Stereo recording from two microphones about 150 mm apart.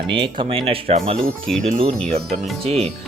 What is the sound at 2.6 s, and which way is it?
Speech, 40° right (ahead or behind).